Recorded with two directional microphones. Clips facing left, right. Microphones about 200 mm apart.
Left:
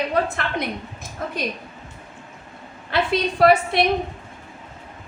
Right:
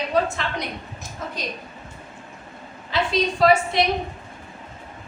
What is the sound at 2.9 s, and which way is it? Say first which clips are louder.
Speech: left 1 dB; 55° left (ahead or behind).